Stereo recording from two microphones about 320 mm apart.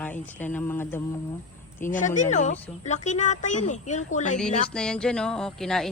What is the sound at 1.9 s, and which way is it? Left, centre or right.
Speech, left.